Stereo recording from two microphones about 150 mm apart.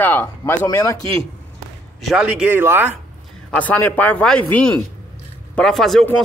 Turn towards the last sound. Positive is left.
turn(degrees=0)  # may be behind; listen again after turning